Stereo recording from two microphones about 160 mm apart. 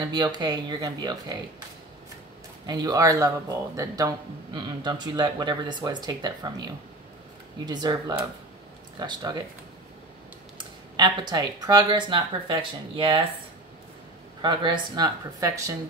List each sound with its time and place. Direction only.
0.1 s speech: 25° right (ahead or behind)
2.6 s speech: 25° right (ahead or behind)
11.0 s speech: 25° right (ahead or behind)
14.4 s speech: 30° right (ahead or behind)